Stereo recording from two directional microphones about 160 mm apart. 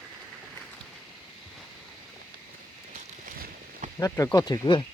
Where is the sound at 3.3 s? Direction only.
60° right (ahead or behind).